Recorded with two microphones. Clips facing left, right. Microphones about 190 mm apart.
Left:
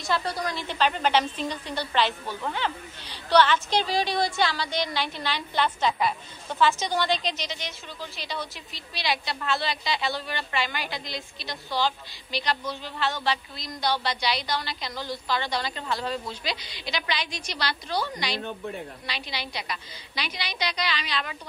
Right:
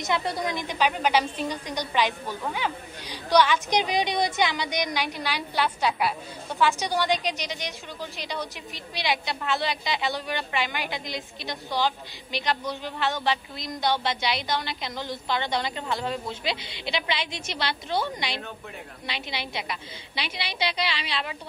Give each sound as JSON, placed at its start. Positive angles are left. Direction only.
{"t": 0.0, "sound": "a woman's voice", "side_deg": -20}